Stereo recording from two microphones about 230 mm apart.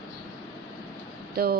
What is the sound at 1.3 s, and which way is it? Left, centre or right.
Speech, right.